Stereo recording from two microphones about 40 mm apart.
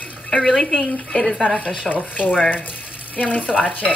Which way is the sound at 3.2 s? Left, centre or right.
Left.